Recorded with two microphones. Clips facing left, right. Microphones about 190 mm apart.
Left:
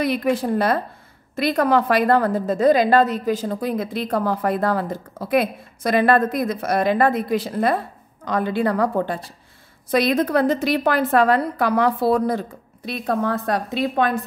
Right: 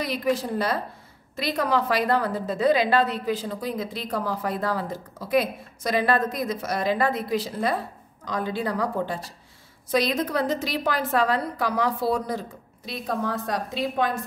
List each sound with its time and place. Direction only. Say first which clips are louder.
0.0 s a woman's voice: left 5 dB; 55° left (ahead or behind)